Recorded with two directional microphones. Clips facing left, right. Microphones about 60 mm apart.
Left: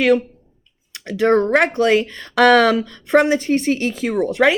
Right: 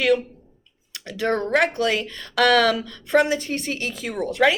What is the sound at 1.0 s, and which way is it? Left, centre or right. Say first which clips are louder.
Speech: left 8 dB; left.